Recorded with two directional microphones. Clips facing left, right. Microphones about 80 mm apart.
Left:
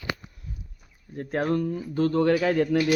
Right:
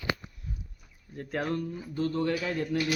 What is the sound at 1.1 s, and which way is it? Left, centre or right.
Speech, left.